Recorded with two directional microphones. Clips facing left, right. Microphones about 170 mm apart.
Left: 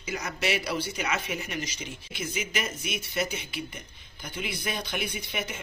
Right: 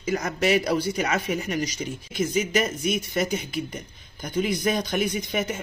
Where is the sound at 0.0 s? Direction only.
45° right (ahead or behind).